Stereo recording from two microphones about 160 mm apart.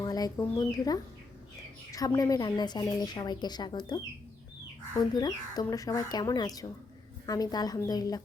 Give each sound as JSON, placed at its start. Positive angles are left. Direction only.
{"t": 0.0, "sound": "bird", "side_deg": 25}
{"t": 0.5, "sound": "speech", "side_deg": 25}